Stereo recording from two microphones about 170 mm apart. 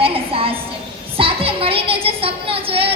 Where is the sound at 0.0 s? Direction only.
35° right (ahead or behind).